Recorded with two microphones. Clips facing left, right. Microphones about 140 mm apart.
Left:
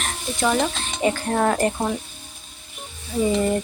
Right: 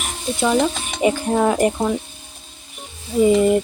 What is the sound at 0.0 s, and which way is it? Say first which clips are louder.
Speech: right 2 dB; 5° right (ahead or behind).